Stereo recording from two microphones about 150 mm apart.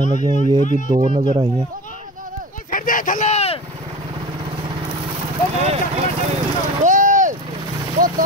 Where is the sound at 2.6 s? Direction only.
65° left (ahead or behind); by 3.6 s 45° left (ahead or behind).